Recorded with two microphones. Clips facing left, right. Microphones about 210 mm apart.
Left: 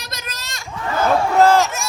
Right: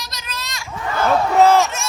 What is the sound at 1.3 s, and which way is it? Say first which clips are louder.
Speech: right 1 dB; centre (ahead or behind).